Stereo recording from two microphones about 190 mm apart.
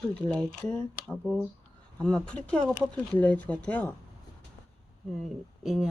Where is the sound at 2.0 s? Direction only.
5° left (ahead or behind).